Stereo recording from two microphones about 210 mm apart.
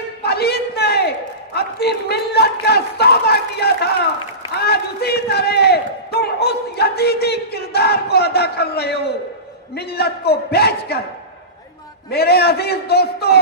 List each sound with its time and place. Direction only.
0.2 s a sound: 50° left (ahead or behind)
4.6 s crowd: 50° left (ahead or behind)
9.8 s a man's voice: 50° left (ahead or behind)
12.1 s a man's voice: 50° left (ahead or behind)